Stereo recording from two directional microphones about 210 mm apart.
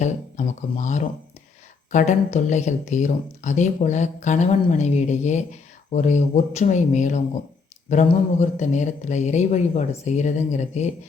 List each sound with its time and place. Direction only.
0.0 s speech: 35° left (ahead or behind)